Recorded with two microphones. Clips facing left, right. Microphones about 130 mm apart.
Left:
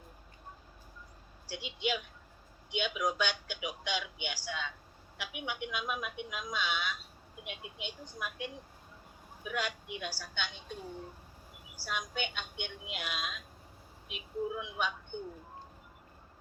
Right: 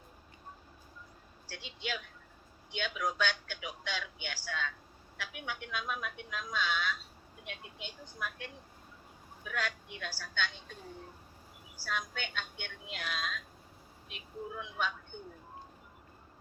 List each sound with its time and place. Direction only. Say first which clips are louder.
1.5 s speech: left 6 dB; 15° left (ahead or behind)
11.9 s speech: left 1 dB; 15° left (ahead or behind)